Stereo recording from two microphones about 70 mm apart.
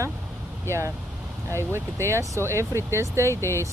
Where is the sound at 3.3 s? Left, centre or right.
Left.